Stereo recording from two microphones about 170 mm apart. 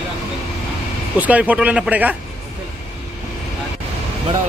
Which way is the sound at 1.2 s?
10° right (ahead or behind).